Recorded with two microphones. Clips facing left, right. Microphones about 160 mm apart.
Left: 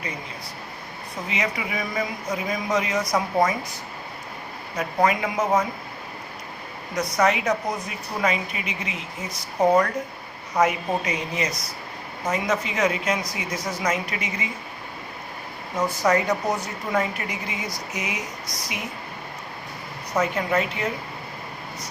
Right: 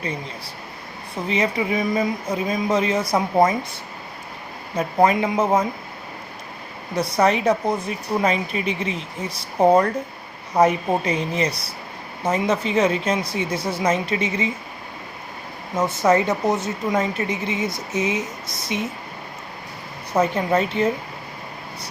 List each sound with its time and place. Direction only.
1.3 s a woman's voice: 30° right (ahead or behind)
4.8 s a woman's voice: 30° right (ahead or behind)
6.9 s a woman's voice: 30° right (ahead or behind)
15.8 s a woman's voice: 25° right (ahead or behind)
20.1 s a woman's voice: 30° right (ahead or behind)